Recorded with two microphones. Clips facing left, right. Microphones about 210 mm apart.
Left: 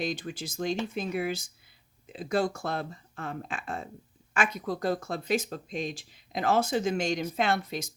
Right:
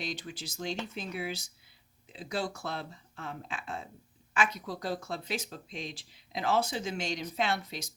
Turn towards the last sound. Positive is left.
turn(degrees=50)  # may be behind; listen again after turning